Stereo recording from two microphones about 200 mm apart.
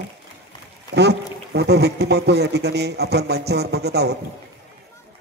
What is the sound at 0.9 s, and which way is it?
Speech, 55° right (ahead or behind).